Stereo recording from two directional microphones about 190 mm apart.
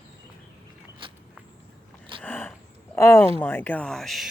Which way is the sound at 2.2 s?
10° left (ahead or behind).